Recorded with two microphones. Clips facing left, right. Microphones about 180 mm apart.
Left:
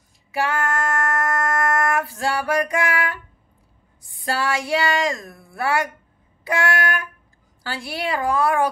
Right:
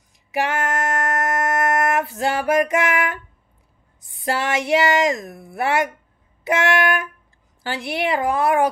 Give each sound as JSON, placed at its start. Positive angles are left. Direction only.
{"t": 0.3, "sound": "female singing", "side_deg": -20}
{"t": 4.0, "sound": "speech", "side_deg": -20}